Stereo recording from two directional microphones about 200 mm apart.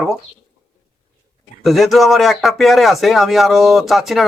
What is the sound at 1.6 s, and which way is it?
Speech, centre (ahead or behind).